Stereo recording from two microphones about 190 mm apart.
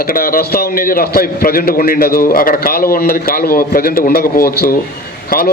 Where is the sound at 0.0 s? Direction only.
50° left (ahead or behind).